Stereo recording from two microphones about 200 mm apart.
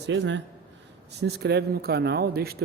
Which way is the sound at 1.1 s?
55° right (ahead or behind).